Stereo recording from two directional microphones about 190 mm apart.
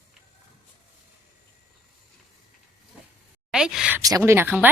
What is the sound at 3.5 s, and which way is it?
Speech, 5° right (ahead or behind).